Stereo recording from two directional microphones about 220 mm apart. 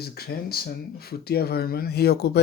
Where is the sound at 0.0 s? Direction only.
45° left (ahead or behind).